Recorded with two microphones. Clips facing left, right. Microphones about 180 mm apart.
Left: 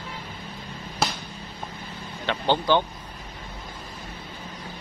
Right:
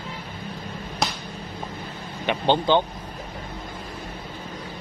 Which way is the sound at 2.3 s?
20° right (ahead or behind).